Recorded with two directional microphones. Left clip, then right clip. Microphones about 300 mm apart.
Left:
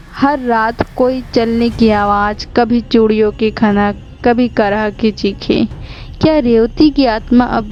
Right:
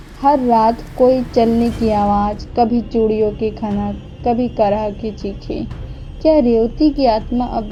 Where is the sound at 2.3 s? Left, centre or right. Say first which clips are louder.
Left 3 dB; left.